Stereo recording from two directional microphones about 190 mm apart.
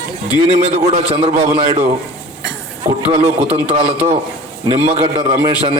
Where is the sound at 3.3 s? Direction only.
10° right (ahead or behind).